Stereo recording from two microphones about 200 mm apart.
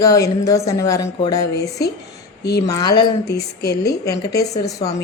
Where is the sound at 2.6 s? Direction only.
15° left (ahead or behind).